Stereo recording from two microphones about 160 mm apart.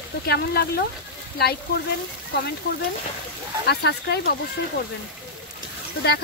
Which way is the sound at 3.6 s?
90° left.